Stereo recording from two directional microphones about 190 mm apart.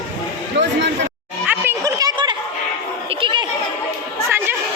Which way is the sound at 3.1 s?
25° right (ahead or behind).